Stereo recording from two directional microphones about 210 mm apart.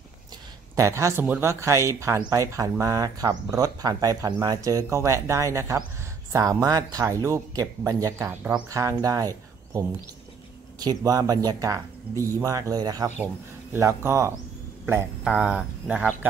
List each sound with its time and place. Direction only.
0.7 s speech: 15° right (ahead or behind)